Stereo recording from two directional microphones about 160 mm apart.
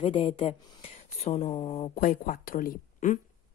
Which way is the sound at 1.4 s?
35° left (ahead or behind).